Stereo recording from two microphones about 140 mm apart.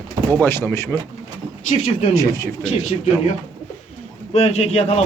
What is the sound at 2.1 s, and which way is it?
Speech, 25° left (ahead or behind).